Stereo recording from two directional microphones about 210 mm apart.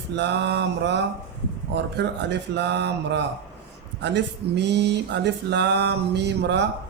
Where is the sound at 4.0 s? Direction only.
55° right (ahead or behind).